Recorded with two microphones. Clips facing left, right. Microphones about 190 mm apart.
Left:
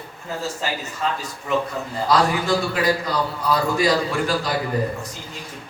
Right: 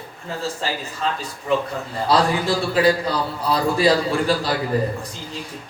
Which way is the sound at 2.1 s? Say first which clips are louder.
Even; 30° right (ahead or behind).